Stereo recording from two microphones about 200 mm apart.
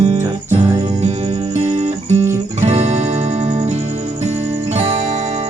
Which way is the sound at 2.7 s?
35° right (ahead or behind).